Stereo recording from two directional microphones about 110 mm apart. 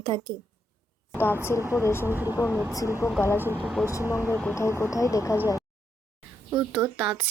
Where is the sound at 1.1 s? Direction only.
20° left (ahead or behind).